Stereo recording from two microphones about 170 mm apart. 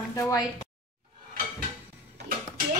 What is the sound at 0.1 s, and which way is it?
Speech, 20° left (ahead or behind).